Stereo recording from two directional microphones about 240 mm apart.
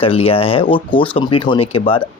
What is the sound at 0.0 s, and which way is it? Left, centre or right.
Speech, left.